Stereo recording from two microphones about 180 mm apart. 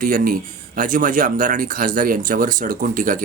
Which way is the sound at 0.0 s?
50° right (ahead or behind).